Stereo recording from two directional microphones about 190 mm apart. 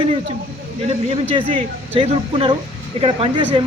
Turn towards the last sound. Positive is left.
turn(degrees=-30)  # may be behind; listen again after turning